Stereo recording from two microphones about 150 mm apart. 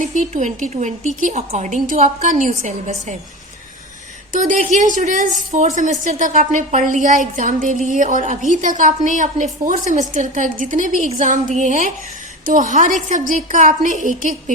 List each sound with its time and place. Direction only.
0.0 s a woman's voice: 55° right (ahead or behind)
4.3 s a woman's voice: 60° right (ahead or behind)